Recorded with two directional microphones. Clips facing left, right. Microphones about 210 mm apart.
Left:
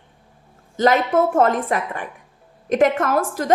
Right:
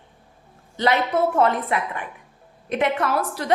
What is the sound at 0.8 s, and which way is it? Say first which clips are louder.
A woman's voice: left 4 dB; 45° left (ahead or behind).